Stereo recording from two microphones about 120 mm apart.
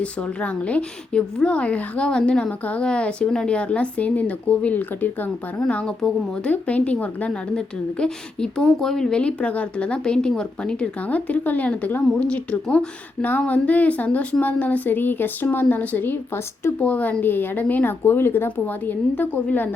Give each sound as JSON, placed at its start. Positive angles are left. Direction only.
{"t": 0.0, "sound": "a woman's voice", "side_deg": 10}